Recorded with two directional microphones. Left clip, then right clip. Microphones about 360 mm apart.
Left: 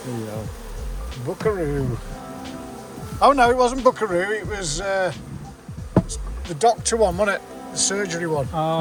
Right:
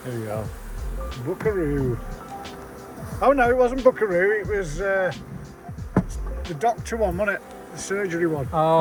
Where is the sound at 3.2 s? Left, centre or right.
Centre.